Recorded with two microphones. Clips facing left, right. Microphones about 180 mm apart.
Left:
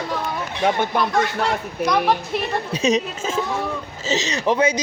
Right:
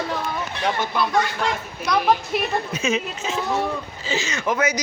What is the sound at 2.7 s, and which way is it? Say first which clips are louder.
Speech: left 4 dB; 35° left (ahead or behind).